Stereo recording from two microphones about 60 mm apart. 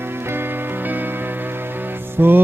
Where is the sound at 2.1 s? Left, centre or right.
Right.